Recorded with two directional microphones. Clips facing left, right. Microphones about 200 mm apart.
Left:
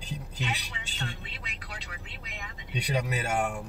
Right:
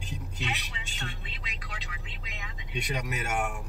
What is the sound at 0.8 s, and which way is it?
Speech, 45° left (ahead or behind).